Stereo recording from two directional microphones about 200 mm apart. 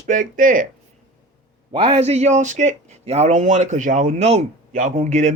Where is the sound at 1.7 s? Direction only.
30° right (ahead or behind).